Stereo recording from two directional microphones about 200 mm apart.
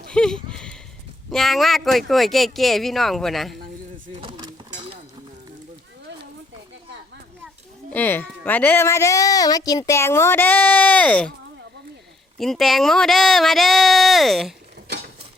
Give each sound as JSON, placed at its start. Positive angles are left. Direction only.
{"t": 0.1, "sound": "speech", "side_deg": 5}
{"t": 4.1, "sound": "a sound", "side_deg": -25}
{"t": 7.9, "sound": "speech", "side_deg": 10}
{"t": 12.4, "sound": "speech", "side_deg": 0}